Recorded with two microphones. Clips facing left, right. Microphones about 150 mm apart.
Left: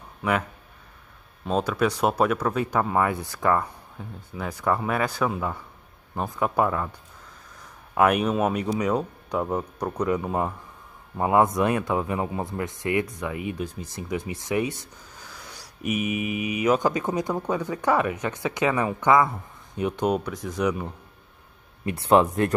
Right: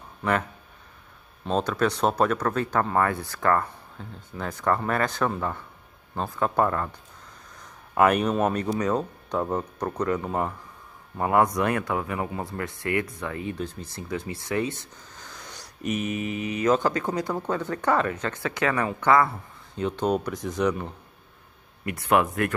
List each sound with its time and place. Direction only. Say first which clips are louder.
0.2 s speech: even; 5° left (ahead or behind)
7.9 s speech: even; centre (ahead or behind)
20.2 s speech: right 1 dB; centre (ahead or behind)
21.8 s speech: left 3 dB; 30° left (ahead or behind)